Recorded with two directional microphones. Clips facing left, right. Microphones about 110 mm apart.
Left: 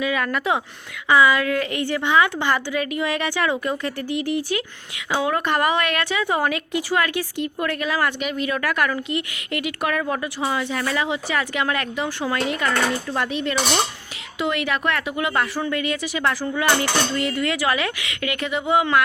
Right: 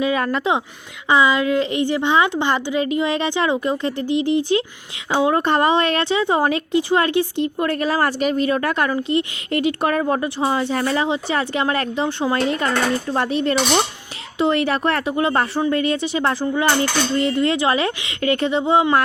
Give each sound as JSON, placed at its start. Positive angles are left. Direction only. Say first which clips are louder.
{"t": 0.0, "sound": "a woman's voice", "louder": "right 3 dB", "side_deg": -30}